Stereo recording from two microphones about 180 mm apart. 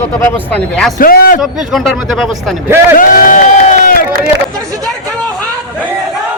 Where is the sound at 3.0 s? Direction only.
50° left (ahead or behind).